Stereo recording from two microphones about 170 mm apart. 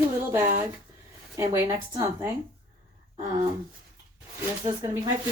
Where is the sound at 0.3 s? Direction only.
15° right (ahead or behind).